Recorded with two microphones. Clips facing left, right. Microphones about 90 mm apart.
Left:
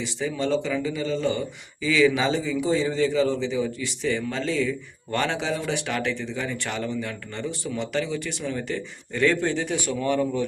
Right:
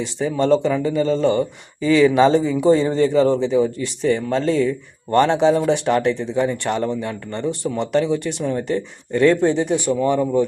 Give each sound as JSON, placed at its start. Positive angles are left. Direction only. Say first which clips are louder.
{"t": 0.0, "sound": "speech", "louder": "right 7 dB", "side_deg": -40}
{"t": 9.4, "sound": "speech", "louder": "right 8 dB", "side_deg": -15}